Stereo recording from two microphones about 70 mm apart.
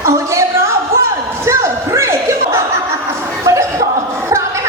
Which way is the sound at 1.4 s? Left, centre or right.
Right.